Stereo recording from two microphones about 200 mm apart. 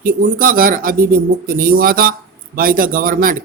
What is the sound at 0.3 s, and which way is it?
Speech, 45° right (ahead or behind).